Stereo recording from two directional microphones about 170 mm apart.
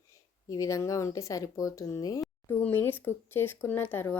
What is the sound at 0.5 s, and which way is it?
Speech, 20° left (ahead or behind).